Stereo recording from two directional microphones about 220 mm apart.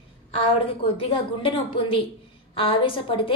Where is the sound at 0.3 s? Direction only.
25° left (ahead or behind).